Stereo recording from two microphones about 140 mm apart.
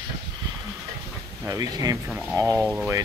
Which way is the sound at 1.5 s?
25° right (ahead or behind).